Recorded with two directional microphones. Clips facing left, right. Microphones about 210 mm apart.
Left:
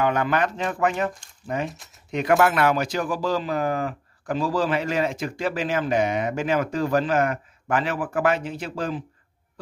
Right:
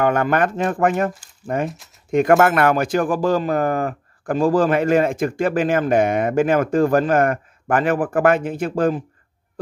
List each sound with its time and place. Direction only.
0.0 s speech: 50° right (ahead or behind)